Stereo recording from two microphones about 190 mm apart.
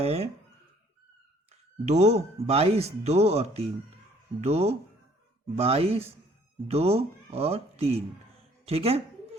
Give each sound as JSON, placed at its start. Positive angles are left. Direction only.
{"t": 0.0, "sound": "speech", "side_deg": -35}
{"t": 1.5, "sound": "speech", "side_deg": -35}